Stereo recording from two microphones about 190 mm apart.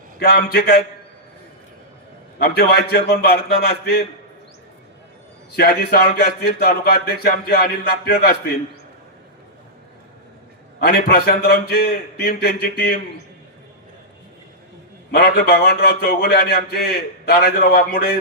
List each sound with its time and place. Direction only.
0.2 s a man's voice: 55° left (ahead or behind)
2.4 s a man's voice: 55° left (ahead or behind)
5.5 s a man's voice: 55° left (ahead or behind)
10.8 s a man's voice: 55° left (ahead or behind)
15.1 s a man's voice: 60° left (ahead or behind)